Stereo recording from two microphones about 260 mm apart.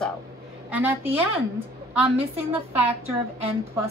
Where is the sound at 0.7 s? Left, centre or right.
Centre.